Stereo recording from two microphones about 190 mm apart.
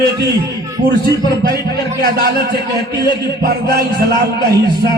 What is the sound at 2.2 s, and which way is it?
Speech, 55° right (ahead or behind).